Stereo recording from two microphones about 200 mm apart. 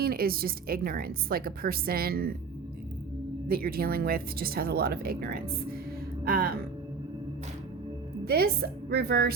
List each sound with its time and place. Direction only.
0.0 s a woman's voice: 50° right (ahead or behind)
3.5 s a woman's voice: 50° right (ahead or behind)
6.2 s music: 50° right (ahead or behind)
8.2 s a woman's voice: 50° right (ahead or behind)